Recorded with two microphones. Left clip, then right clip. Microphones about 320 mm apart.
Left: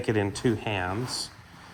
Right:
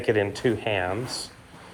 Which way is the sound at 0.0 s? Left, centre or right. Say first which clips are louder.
Right 4 dB; centre.